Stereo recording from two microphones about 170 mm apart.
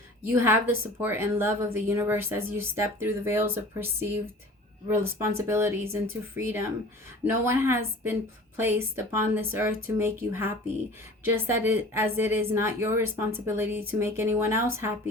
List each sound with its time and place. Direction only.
0.3 s a woman's voice: 15° right (ahead or behind)